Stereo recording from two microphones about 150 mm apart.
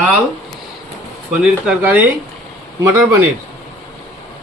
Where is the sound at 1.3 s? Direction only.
5° right (ahead or behind).